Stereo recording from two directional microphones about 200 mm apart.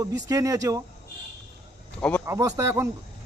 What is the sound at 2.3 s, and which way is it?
Speech, 15° right (ahead or behind).